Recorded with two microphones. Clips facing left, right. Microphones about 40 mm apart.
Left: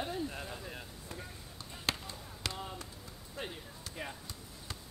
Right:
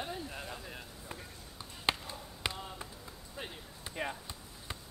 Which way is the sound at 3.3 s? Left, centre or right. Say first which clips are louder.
Left 2 dB; centre.